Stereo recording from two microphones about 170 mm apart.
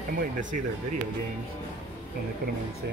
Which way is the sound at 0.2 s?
50° right (ahead or behind).